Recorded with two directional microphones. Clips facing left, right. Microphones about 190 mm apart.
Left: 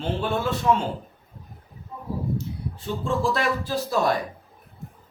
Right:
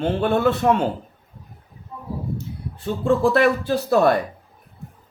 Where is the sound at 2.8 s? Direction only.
60° right (ahead or behind).